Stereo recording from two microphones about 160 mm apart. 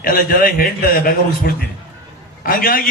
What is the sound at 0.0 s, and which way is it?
A man's voice, 65° left (ahead or behind).